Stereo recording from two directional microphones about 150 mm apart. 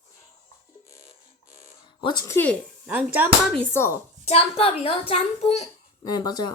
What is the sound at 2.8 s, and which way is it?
Speech, 10° right (ahead or behind).